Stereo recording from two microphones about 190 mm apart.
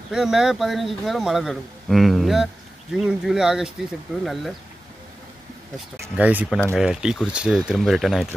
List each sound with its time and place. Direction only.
0.1 s speech: centre (ahead or behind)
6.1 s speech: 5° right (ahead or behind)